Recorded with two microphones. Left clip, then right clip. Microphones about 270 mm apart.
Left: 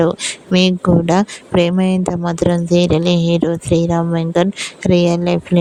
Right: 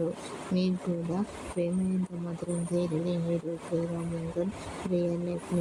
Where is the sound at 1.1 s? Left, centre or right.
Left.